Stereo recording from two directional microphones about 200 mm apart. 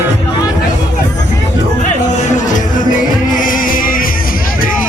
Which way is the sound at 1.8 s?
35° left (ahead or behind).